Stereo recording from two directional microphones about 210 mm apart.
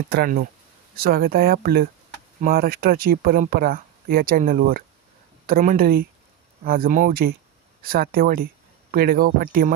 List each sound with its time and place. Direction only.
0.1 s speech: 45° right (ahead or behind)